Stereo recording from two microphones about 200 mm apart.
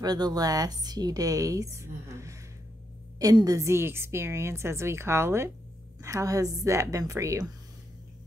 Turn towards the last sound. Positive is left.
turn(degrees=-15)  # may be behind; listen again after turning